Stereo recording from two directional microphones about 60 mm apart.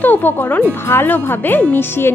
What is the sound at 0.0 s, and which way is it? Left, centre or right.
Speech, left.